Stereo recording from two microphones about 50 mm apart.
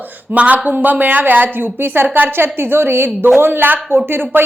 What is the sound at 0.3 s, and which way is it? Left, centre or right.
A woman's voice, right.